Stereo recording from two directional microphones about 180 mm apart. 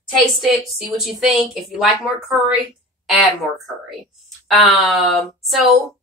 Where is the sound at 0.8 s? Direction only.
Centre (ahead or behind).